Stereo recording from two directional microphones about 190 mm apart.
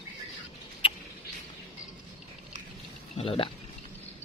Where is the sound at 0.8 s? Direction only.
30° left (ahead or behind).